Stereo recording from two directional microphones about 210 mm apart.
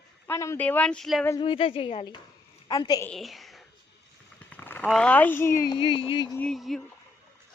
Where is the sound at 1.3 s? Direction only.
20° left (ahead or behind).